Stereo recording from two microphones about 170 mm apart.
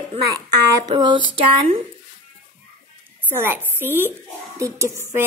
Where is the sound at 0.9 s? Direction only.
25° right (ahead or behind).